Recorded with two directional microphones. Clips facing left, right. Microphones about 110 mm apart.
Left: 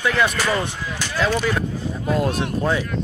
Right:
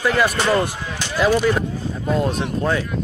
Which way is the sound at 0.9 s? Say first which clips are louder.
Right 4 dB; 10° right (ahead or behind).